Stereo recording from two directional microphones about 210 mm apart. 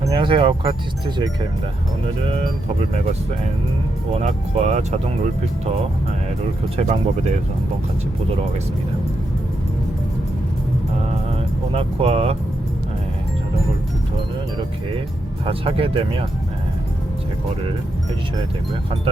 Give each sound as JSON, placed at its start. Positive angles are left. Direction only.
{"t": 0.1, "sound": "speech", "side_deg": -25}
{"t": 4.1, "sound": "speech", "side_deg": -30}
{"t": 6.7, "sound": "speech", "side_deg": -30}
{"t": 11.7, "sound": "speech", "side_deg": -25}
{"t": 15.4, "sound": "speech", "side_deg": -25}